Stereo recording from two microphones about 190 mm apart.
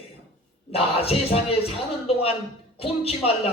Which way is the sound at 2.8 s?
30° left (ahead or behind).